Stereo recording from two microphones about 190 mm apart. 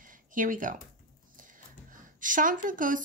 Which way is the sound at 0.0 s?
45° right (ahead or behind).